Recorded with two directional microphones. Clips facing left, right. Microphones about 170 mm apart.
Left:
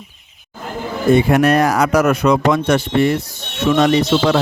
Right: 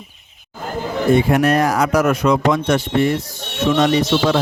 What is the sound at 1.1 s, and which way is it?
Speech, 75° left (ahead or behind).